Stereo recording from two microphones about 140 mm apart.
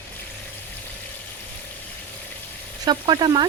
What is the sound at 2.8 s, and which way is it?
Speech, 30° right (ahead or behind).